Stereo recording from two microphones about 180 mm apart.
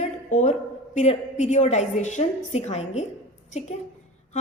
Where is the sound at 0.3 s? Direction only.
40° left (ahead or behind).